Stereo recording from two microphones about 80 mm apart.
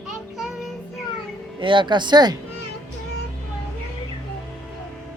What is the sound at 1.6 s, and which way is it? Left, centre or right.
Speech, right.